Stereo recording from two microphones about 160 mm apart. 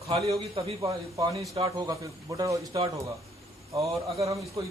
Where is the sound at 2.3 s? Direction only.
20° right (ahead or behind).